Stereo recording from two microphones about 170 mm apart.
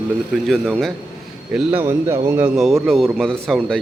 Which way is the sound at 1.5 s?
10° right (ahead or behind).